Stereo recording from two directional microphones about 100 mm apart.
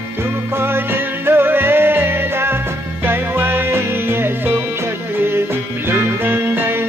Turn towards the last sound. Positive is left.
turn(degrees=-20)  # may be behind; listen again after turning